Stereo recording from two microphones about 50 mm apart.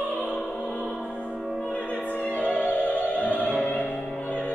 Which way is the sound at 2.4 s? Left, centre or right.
Left.